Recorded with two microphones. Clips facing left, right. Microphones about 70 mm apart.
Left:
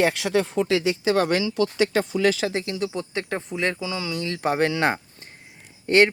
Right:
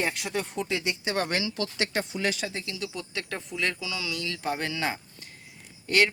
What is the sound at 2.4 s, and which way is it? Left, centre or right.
Speech, left.